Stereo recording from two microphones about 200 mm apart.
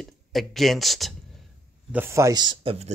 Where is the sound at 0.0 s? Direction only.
Centre (ahead or behind).